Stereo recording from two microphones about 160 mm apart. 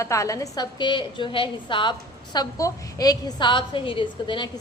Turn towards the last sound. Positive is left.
turn(degrees=30)  # may be behind; listen again after turning